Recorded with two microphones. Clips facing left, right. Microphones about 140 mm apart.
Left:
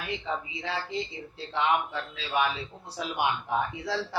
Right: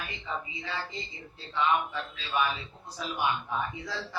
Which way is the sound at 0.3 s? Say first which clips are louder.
Left 1 dB; 80° left.